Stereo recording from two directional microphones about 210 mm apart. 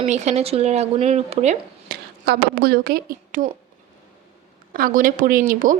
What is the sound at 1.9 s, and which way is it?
A woman's voice, 50° right (ahead or behind).